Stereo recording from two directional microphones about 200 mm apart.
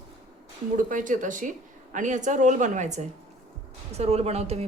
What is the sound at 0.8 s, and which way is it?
Speech, 40° right (ahead or behind).